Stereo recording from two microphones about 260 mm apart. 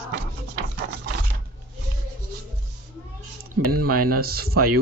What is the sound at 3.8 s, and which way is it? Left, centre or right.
Speech, right.